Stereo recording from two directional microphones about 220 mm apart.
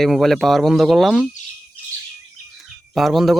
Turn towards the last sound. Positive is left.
turn(degrees=0)  # may be behind; listen again after turning